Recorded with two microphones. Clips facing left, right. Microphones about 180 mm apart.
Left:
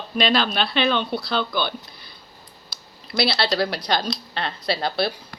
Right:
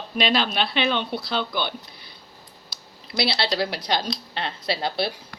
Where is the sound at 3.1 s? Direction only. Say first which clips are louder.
Left 2 dB; 20° right (ahead or behind).